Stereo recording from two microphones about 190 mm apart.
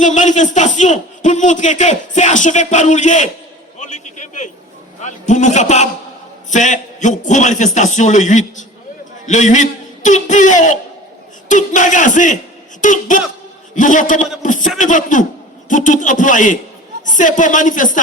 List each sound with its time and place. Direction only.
0.0 s a man's voice: 40° left (ahead or behind)
3.8 s a sound: 40° left (ahead or behind)
4.9 s a man's voice: 40° left (ahead or behind)